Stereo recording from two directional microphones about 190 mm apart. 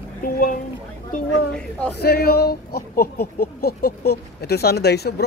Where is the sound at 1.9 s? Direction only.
55° left (ahead or behind).